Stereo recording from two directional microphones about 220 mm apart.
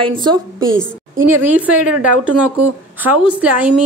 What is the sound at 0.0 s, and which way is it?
Speech, 20° right (ahead or behind).